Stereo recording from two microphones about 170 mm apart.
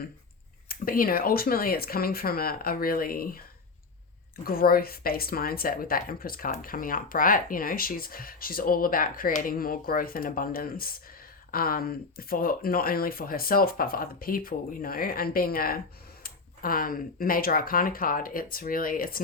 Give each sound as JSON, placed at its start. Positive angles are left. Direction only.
{"t": 0.7, "sound": "a woman's voice", "side_deg": 60}
{"t": 4.4, "sound": "a woman's voice", "side_deg": 60}